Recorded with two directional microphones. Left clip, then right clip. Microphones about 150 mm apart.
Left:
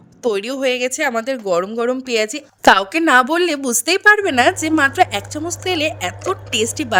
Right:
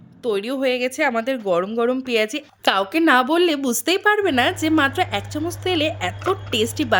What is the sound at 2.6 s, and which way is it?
A woman's voice, 75° left (ahead or behind).